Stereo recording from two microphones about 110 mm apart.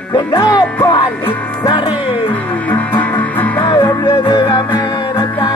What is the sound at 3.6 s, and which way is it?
Music, 40° left (ahead or behind).